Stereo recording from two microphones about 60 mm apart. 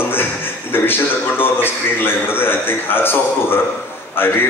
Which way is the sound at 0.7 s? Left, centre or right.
Left.